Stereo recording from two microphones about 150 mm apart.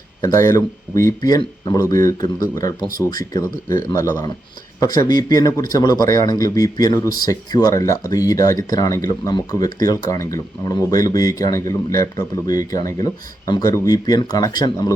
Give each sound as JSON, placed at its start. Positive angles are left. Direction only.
{"t": 0.2, "sound": "speech", "side_deg": 20}